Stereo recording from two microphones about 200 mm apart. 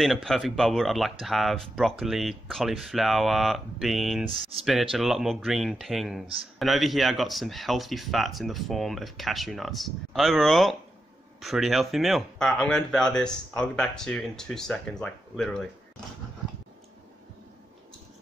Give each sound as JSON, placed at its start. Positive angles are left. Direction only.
{"t": 0.0, "sound": "speech", "side_deg": 0}
{"t": 4.3, "sound": "speech", "side_deg": -30}
{"t": 4.9, "sound": "speech", "side_deg": 0}